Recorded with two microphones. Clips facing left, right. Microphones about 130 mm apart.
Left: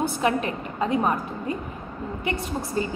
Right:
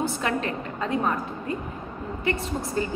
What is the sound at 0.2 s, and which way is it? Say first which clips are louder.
Speech: left 3 dB; 15° left (ahead or behind).